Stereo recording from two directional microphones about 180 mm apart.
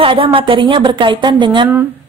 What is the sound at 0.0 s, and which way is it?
Speech, 30° right (ahead or behind).